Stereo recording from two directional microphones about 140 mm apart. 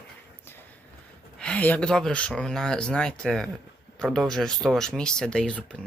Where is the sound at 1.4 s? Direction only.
10° left (ahead or behind).